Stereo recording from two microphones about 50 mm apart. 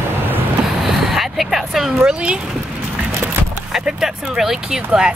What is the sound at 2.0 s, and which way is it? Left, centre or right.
Speech, centre.